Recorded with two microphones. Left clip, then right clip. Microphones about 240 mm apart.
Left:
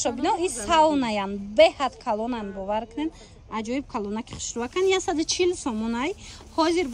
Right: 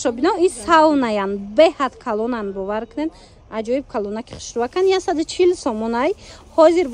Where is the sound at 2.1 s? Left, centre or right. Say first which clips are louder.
Right 7 dB; right.